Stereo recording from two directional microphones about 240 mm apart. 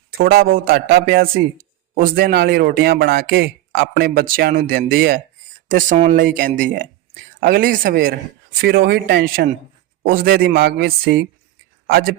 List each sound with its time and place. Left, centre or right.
0.2 s a man's voice: right